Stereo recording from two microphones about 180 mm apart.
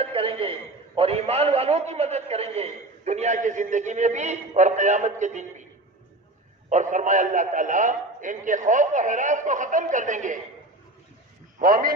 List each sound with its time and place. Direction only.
0.0 s a man's voice: 30° right (ahead or behind)
6.7 s a man's voice: 45° right (ahead or behind)
11.6 s a man's voice: 50° right (ahead or behind)